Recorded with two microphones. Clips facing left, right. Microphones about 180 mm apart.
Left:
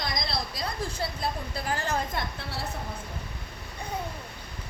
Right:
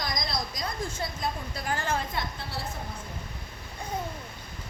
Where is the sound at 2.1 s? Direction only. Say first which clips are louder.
Left 1 dB; 65° left (ahead or behind).